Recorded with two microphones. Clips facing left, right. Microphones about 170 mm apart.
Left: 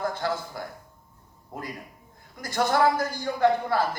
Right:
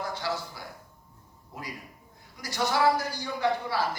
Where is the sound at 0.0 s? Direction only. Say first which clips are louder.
Left 4 dB; 50° left (ahead or behind).